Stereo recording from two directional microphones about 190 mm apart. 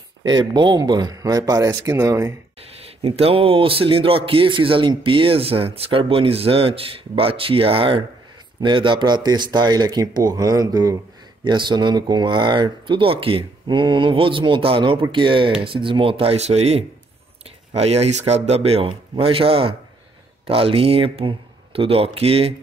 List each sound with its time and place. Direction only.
0.2 s speech: 25° right (ahead or behind)
2.8 s speech: 30° right (ahead or behind)